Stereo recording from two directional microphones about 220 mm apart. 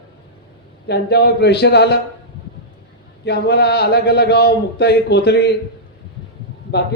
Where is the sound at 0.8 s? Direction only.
45° left (ahead or behind).